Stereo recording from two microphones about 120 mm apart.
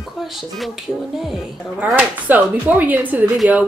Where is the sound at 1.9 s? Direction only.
15° right (ahead or behind).